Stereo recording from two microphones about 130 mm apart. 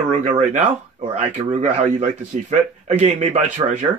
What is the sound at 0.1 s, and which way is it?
A man's voice, 65° right (ahead or behind).